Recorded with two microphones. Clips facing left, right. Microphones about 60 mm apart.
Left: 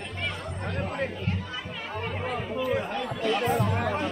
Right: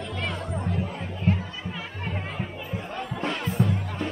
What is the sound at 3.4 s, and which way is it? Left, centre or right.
Music, left.